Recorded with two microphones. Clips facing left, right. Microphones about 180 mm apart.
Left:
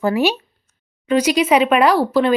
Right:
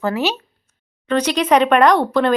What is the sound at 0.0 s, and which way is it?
Speech, 10° left (ahead or behind).